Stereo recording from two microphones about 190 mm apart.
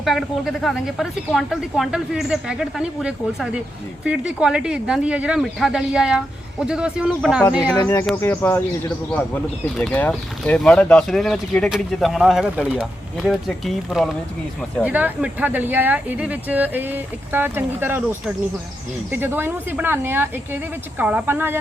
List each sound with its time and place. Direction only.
0.0 s speech: centre (ahead or behind)
7.8 s speech: 15° left (ahead or behind); by 21.6 s 10° right (ahead or behind)